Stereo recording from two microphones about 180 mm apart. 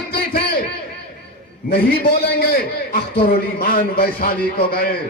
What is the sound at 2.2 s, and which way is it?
A man's voice, 60° left (ahead or behind).